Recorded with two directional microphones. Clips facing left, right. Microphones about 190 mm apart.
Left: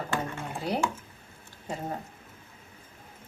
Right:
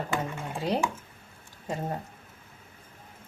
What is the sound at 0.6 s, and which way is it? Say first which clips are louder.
Speech: right 1 dB; 20° right (ahead or behind).